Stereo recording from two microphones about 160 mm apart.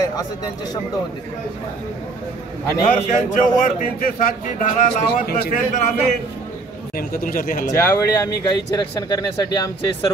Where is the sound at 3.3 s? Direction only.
55° left (ahead or behind).